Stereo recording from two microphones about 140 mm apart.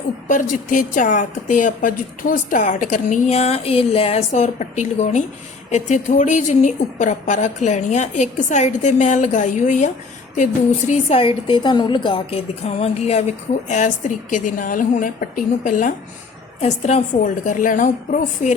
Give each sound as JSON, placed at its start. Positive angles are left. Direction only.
{"t": 0.3, "sound": "a woman's voice", "side_deg": 70}
{"t": 11.2, "sound": "a woman's voice", "side_deg": 40}
{"t": 16.6, "sound": "a woman's voice", "side_deg": 55}